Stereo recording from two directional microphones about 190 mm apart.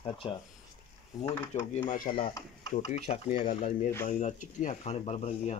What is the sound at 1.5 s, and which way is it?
Speech, 40° left (ahead or behind).